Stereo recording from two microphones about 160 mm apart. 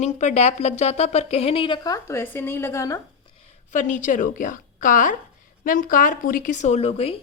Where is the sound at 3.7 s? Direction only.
50° left (ahead or behind).